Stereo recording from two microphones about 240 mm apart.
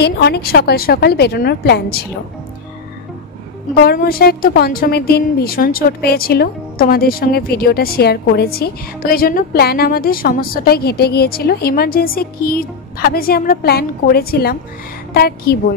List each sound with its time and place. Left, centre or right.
0.0 s a woman's voice: left
3.8 s a woman's voice: left